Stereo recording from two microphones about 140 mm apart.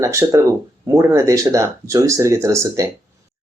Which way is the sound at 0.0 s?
20° right (ahead or behind).